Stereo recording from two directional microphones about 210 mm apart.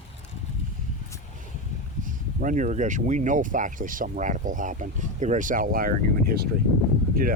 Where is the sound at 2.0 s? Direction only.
40° right (ahead or behind).